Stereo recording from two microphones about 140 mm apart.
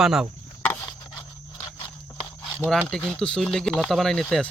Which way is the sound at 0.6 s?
15° left (ahead or behind).